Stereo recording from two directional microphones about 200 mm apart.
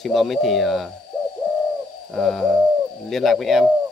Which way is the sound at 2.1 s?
Centre (ahead or behind).